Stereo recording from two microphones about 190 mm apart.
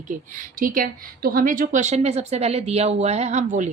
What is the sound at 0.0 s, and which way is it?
A woman's voice, 45° right (ahead or behind).